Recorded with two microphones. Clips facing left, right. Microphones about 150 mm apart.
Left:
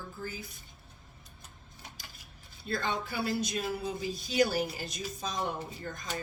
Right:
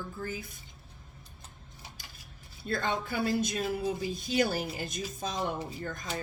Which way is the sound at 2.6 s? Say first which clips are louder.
Right 2 dB; 50° right (ahead or behind).